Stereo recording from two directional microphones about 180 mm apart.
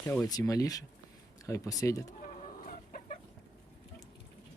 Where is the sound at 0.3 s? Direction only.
20° left (ahead or behind).